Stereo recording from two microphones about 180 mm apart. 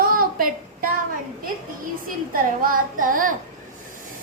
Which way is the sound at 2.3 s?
50° right (ahead or behind).